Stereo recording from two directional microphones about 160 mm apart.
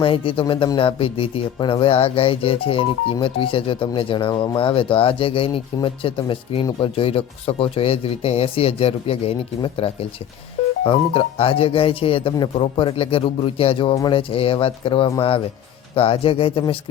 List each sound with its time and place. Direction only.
0.0 s speech: 35° left (ahead or behind)